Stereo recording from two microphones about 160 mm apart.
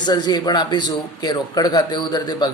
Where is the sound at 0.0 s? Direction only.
25° left (ahead or behind).